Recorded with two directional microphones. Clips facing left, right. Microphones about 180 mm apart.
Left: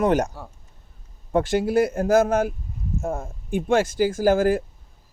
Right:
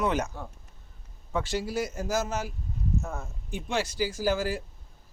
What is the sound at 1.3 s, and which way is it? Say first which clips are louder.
Speech: left 9 dB; 55° left (ahead or behind).